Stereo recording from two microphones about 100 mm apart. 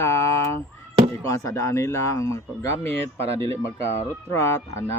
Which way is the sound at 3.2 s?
90° right.